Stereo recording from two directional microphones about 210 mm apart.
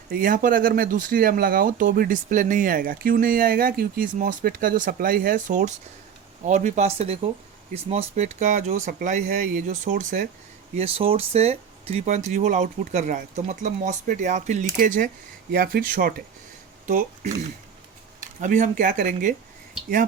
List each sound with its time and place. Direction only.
0.1 s speech: 40° right (ahead or behind)
10.8 s speech: 25° right (ahead or behind)
18.3 s speech: 35° right (ahead or behind)